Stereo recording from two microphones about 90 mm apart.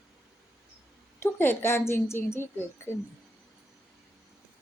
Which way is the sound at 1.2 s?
25° left (ahead or behind).